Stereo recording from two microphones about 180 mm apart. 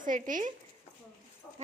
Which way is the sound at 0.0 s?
45° right (ahead or behind).